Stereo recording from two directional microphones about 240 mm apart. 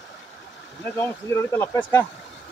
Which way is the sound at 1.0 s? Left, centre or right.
Centre.